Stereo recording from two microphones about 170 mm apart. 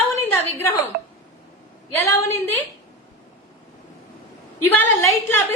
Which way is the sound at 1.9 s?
15° left (ahead or behind).